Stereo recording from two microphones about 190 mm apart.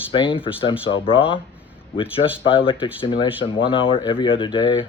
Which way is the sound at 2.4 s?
25° left (ahead or behind).